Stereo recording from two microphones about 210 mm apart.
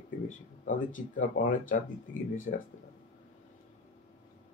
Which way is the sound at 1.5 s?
40° left (ahead or behind).